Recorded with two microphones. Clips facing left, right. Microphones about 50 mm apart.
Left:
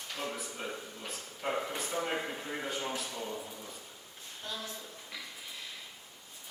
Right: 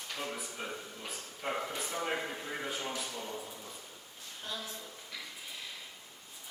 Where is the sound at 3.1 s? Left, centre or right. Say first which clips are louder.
Left 2 dB; centre.